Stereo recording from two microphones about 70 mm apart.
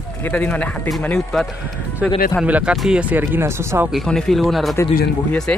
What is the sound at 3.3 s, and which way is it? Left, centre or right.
Speech, right.